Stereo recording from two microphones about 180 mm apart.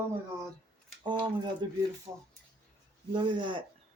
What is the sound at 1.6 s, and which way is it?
Speech, 25° right (ahead or behind).